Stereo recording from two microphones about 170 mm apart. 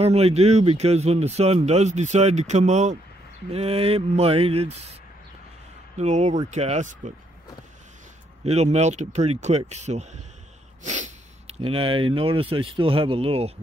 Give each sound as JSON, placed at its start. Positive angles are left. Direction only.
{"t": 0.0, "sound": "a man's voice", "side_deg": -35}
{"t": 5.9, "sound": "speech", "side_deg": -45}
{"t": 8.5, "sound": "a man's voice", "side_deg": -40}
{"t": 10.8, "sound": "snort", "side_deg": -45}
{"t": 11.6, "sound": "a man's voice", "side_deg": -30}